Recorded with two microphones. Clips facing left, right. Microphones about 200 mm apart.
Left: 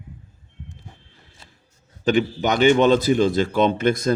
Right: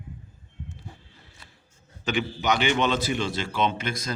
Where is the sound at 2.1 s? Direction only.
45° left (ahead or behind).